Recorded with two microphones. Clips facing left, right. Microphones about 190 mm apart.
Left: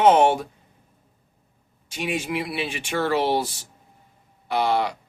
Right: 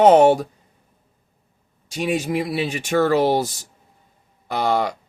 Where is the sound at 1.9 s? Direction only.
40° right (ahead or behind).